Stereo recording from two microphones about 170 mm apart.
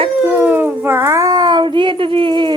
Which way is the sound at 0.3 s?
10° right (ahead or behind).